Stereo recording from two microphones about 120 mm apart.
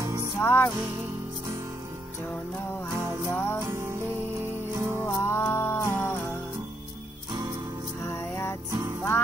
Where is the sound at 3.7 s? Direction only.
20° right (ahead or behind).